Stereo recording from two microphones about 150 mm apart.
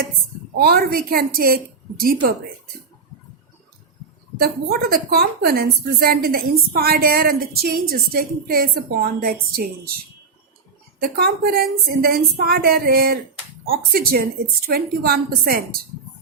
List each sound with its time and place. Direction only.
0.5 s a woman's voice: 90° right
4.4 s a woman's voice: 90° right
11.0 s a woman's voice: 90° right